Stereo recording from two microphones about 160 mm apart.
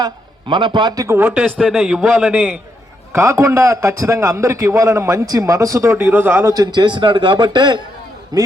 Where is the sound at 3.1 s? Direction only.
15° right (ahead or behind).